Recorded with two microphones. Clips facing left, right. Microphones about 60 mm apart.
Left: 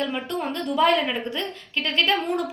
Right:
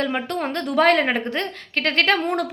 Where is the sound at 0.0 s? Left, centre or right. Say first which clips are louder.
Right 3 dB; right.